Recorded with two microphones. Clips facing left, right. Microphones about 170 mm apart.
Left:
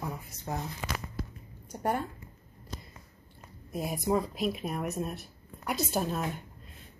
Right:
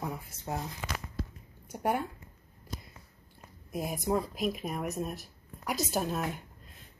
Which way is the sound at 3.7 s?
Centre (ahead or behind).